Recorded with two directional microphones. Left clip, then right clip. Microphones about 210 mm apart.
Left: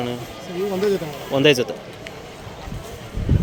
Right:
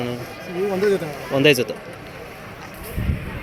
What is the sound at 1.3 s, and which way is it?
Speech, centre (ahead or behind).